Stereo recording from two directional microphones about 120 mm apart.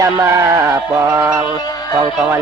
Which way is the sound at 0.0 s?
25° right (ahead or behind).